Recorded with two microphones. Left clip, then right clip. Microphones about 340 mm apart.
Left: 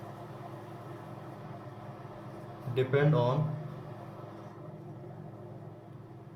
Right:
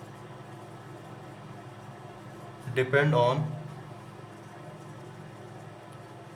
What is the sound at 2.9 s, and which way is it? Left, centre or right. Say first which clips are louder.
Speech: right 5 dB; right.